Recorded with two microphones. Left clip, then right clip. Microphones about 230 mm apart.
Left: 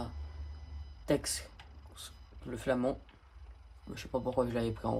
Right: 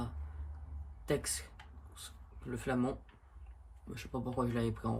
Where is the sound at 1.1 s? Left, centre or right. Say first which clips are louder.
Left 4 dB; left.